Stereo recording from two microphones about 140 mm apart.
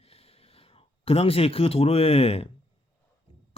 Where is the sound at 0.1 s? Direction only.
45° left (ahead or behind).